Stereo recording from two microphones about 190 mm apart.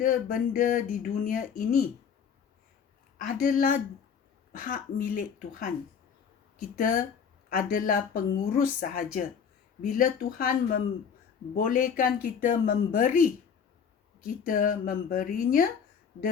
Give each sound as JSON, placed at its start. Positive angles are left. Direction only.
{"t": 0.0, "sound": "speech", "side_deg": 45}
{"t": 3.2, "sound": "speech", "side_deg": 45}
{"t": 6.7, "sound": "speech", "side_deg": 45}